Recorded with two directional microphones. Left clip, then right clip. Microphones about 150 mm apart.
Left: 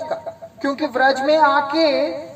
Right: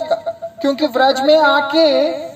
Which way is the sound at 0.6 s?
40° right (ahead or behind).